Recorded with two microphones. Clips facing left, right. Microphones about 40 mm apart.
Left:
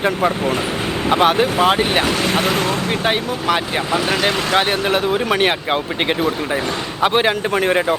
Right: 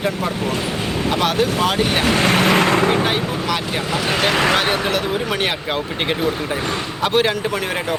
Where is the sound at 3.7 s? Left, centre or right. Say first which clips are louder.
Left 2 dB; centre.